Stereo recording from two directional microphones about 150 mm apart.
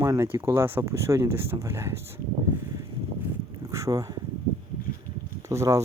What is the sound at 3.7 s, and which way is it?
Speech, 20° right (ahead or behind).